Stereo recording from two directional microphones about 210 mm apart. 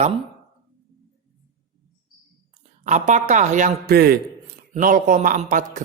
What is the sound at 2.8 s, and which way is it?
Speech, 35° right (ahead or behind).